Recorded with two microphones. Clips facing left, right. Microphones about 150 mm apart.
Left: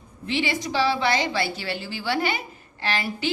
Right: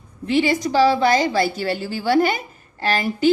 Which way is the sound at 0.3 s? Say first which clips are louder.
Right 7 dB; 45° right (ahead or behind).